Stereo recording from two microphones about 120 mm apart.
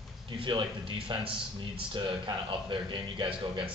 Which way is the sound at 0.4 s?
45° right (ahead or behind).